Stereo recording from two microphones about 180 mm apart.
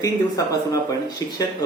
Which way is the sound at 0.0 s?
20° left (ahead or behind).